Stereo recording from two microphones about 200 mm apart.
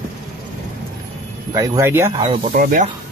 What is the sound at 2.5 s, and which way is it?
Speech, 45° right (ahead or behind).